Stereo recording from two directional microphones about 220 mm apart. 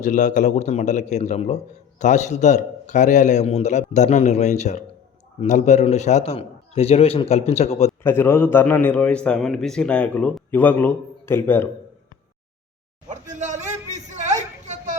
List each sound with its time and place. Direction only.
0.0 s a man's voice: 35° left (ahead or behind)
8.0 s a man's voice: 10° left (ahead or behind)
13.1 s a sound: 35° right (ahead or behind)